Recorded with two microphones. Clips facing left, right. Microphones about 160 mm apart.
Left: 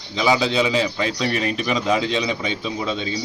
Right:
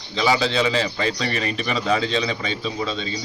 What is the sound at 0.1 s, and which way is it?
A man's voice, 10° left (ahead or behind).